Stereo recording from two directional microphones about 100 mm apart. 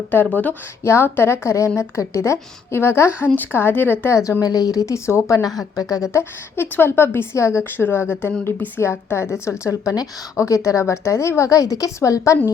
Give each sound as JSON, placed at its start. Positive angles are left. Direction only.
{"t": 0.1, "sound": "a woman's voice", "side_deg": 20}